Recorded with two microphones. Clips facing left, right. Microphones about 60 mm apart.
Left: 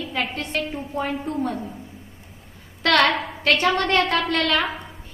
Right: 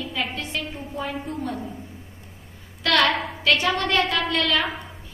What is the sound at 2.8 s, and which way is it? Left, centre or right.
A woman's voice, left.